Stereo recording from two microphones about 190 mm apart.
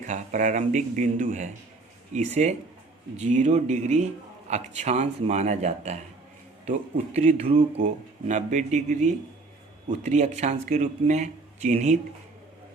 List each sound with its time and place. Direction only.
0.0 s speech: 40° right (ahead or behind)